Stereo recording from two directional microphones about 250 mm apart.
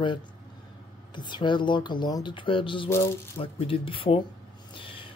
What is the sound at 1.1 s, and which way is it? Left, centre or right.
Speech, centre.